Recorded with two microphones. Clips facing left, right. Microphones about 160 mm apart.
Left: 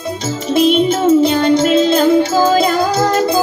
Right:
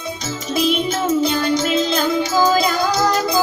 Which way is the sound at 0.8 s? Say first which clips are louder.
Left 7 dB; 30° left (ahead or behind).